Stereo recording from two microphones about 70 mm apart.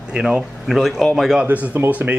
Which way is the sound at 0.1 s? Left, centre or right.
Centre.